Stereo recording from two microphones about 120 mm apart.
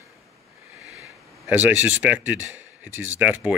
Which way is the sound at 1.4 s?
15° right (ahead or behind).